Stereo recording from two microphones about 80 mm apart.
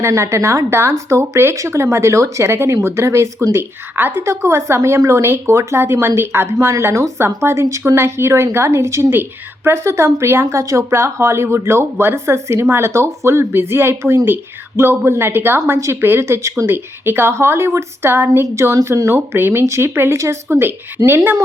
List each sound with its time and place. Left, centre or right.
0.0 s speech: right
3.9 s a woman's voice: right
4.3 s a woman's voice: right